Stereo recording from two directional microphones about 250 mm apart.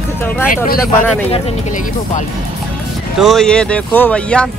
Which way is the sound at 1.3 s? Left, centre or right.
Left.